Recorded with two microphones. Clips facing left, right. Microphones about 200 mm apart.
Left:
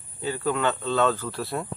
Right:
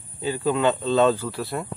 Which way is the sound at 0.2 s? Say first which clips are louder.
Right 3 dB; 15° right (ahead or behind).